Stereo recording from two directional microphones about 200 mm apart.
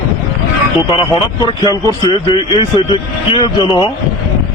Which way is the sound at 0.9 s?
20° left (ahead or behind).